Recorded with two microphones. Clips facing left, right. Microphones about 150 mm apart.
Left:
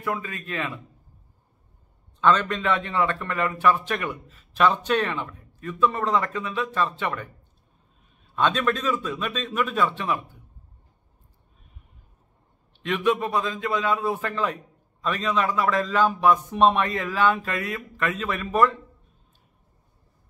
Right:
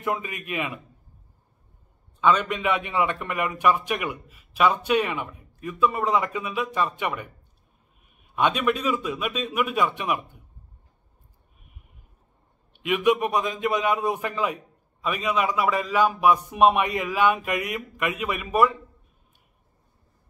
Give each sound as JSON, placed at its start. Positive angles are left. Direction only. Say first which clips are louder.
{"t": 0.0, "sound": "a man's voice", "louder": "right 1 dB", "side_deg": -20}
{"t": 2.1, "sound": "a man's voice", "louder": "even", "side_deg": -10}
{"t": 12.7, "sound": "a man's voice", "louder": "right 2 dB", "side_deg": -10}